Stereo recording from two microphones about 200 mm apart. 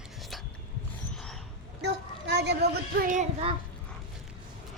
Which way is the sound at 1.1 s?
Centre (ahead or behind).